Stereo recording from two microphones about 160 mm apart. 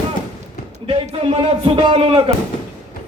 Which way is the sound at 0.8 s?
35° right (ahead or behind).